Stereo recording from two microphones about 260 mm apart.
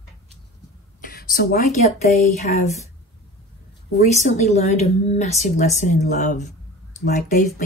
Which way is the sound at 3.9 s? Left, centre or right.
Left.